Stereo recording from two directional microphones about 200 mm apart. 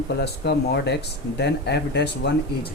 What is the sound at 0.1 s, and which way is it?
Speech, 55° left (ahead or behind).